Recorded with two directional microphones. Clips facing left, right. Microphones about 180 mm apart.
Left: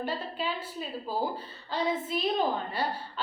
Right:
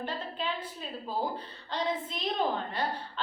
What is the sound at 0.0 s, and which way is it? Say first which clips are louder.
A woman's voice: left 2 dB; 10° left (ahead or behind).